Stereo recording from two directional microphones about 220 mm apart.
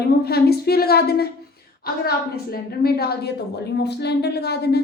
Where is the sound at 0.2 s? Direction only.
45° left (ahead or behind).